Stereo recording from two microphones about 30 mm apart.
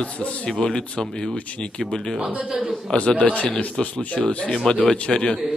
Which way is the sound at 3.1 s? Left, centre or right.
Left.